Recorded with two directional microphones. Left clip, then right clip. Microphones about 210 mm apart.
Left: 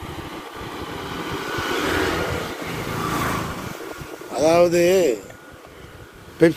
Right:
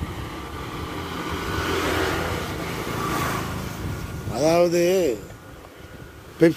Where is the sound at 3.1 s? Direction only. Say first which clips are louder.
Left 2 dB; 40° left (ahead or behind).